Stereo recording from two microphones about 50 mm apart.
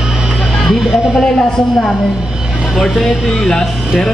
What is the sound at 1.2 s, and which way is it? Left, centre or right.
A man's voice, centre.